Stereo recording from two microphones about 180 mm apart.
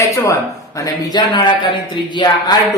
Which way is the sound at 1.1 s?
25° left (ahead or behind).